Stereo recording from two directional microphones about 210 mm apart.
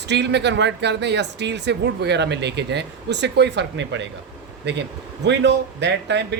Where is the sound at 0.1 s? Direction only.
55° right (ahead or behind).